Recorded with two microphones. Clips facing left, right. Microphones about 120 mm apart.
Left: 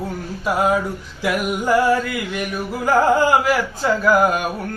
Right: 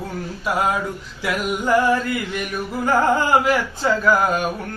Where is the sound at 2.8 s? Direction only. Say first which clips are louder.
Left 3 dB; 5° left (ahead or behind).